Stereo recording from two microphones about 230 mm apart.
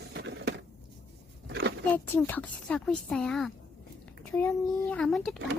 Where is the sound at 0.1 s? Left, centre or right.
Right.